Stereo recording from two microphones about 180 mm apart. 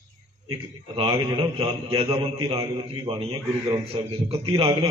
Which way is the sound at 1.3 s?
25° right (ahead or behind).